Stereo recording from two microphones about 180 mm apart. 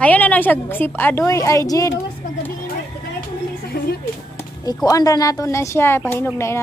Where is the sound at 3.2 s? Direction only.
55° left (ahead or behind).